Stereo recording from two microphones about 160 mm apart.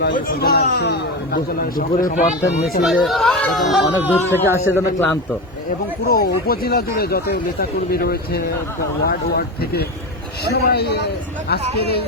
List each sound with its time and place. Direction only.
0.0 s speech: 70° left (ahead or behind); by 2.3 s 55° left (ahead or behind)
2.8 s speech: centre (ahead or behind)
4.1 s speech: 15° left (ahead or behind)
6.1 s a man's voice: 70° left (ahead or behind); by 11.6 s 90° left